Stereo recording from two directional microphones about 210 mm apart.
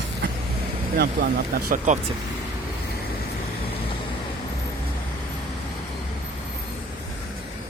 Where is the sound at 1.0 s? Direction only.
45° right (ahead or behind).